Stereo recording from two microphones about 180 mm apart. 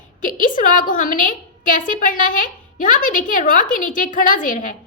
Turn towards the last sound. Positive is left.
turn(degrees=45)  # may be behind; listen again after turning